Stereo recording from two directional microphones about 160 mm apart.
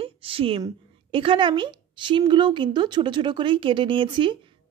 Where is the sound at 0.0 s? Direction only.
35° right (ahead or behind).